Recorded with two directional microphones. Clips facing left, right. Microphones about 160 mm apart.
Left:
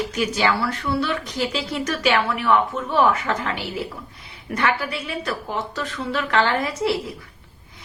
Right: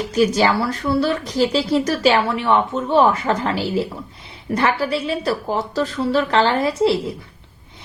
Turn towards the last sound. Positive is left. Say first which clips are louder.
# right 6 dB
turn(degrees=-30)  # may be behind; listen again after turning